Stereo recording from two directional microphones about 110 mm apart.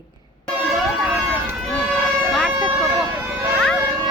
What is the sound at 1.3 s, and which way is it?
Run, 15° right (ahead or behind).